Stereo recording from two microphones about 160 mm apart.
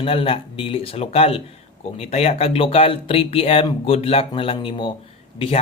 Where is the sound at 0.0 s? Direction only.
35° left (ahead or behind).